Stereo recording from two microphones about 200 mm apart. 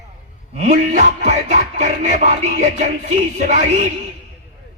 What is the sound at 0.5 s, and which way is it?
Music, 35° right (ahead or behind).